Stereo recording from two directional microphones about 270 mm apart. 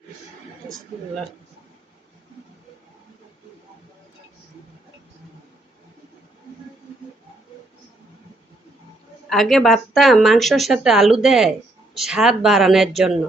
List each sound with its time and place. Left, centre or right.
9.3 s speech: centre